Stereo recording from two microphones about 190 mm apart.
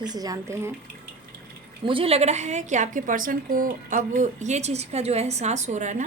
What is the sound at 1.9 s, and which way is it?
A woman's voice, 30° right (ahead or behind).